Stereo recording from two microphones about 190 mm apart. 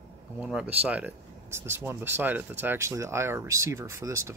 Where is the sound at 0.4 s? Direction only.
5° right (ahead or behind).